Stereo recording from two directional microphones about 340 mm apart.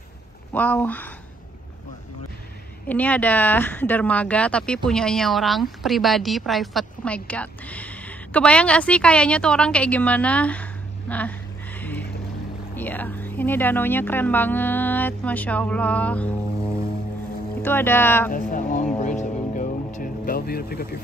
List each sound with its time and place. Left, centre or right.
0.5 s speech: centre
2.9 s a woman's voice: centre
11.8 s a sound: centre
12.7 s speech: centre
17.6 s speech: centre
18.3 s music: left